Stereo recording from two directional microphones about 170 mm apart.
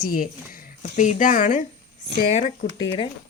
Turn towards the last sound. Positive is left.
turn(degrees=25)  # may be behind; listen again after turning